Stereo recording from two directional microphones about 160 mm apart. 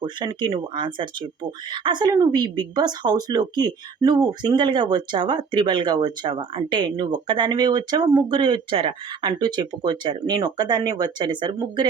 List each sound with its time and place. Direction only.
0.0 s speech: 25° right (ahead or behind)